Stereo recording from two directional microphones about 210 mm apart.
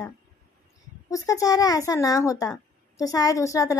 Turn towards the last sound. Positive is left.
turn(degrees=15)  # may be behind; listen again after turning